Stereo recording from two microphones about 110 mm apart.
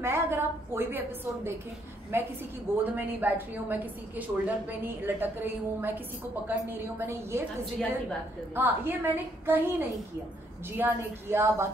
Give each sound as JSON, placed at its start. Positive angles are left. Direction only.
{"t": 0.0, "sound": "a sound", "side_deg": -20}
{"t": 2.1, "sound": "a woman's voice", "side_deg": -20}
{"t": 8.5, "sound": "a woman's voice", "side_deg": -20}